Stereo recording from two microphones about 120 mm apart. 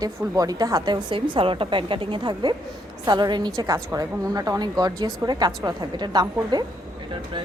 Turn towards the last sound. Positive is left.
turn(degrees=-35)  # may be behind; listen again after turning